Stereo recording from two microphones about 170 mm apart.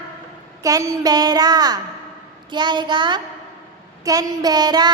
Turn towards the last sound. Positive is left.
turn(degrees=-25)  # may be behind; listen again after turning